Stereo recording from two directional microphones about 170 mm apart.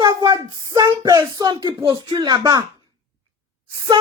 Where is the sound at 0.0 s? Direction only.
25° right (ahead or behind).